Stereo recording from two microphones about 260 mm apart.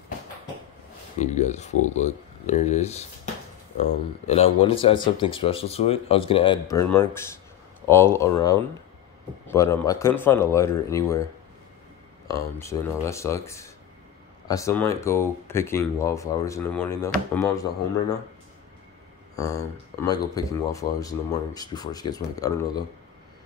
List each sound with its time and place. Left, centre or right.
1.2 s speech: left; by 11.2 s centre
12.3 s speech: centre
19.3 s speech: centre